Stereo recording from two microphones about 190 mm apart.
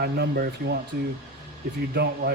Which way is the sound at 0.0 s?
55° right (ahead or behind).